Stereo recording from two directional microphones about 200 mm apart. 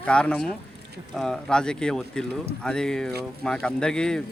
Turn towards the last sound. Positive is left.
turn(degrees=5)  # may be behind; listen again after turning